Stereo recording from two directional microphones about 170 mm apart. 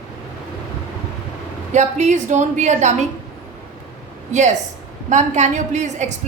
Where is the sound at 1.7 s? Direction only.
45° right (ahead or behind).